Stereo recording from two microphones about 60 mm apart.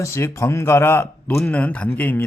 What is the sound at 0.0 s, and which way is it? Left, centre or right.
Speech, left.